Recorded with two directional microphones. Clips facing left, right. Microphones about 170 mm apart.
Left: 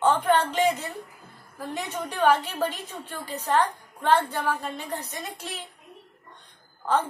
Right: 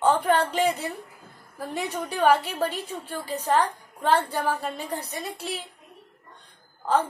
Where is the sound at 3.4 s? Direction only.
10° right (ahead or behind).